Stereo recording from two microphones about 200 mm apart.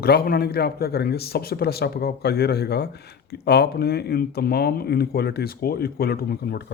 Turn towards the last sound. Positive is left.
turn(degrees=50)  # may be behind; listen again after turning